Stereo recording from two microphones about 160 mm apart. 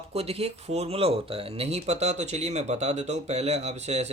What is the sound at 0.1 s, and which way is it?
Speech, 40° right (ahead or behind).